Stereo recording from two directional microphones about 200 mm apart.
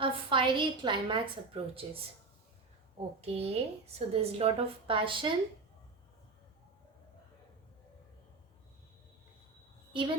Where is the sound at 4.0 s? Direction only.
30° right (ahead or behind).